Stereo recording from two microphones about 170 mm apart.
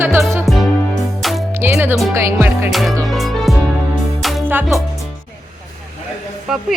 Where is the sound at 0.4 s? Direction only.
Centre (ahead or behind).